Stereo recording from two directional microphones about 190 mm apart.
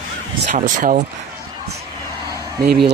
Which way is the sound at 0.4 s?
45° right (ahead or behind).